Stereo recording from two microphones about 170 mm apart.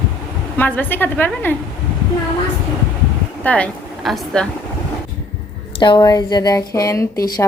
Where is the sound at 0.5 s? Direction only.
10° left (ahead or behind).